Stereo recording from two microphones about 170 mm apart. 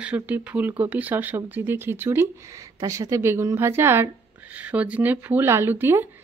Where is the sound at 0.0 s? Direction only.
5° right (ahead or behind).